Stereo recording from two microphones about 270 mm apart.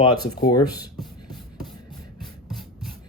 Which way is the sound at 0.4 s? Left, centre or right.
Centre.